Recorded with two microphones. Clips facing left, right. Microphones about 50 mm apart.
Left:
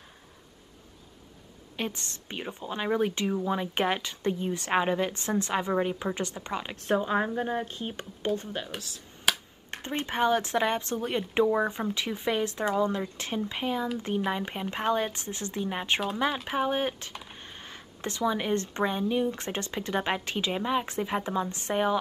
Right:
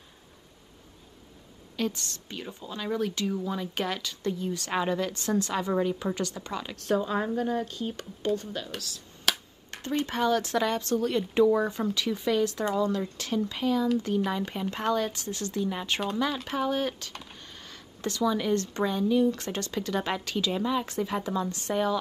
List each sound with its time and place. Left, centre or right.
1.8 s a woman's voice: left
9.3 s finger snapping: centre
9.7 s a woman's voice: left